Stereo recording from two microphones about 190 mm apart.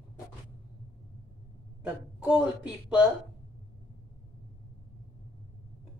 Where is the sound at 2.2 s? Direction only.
5° right (ahead or behind).